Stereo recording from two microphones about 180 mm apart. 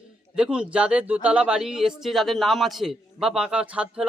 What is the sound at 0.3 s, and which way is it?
Speech, 5° right (ahead or behind).